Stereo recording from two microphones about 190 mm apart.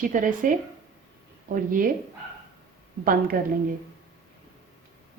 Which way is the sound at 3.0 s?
50° right (ahead or behind).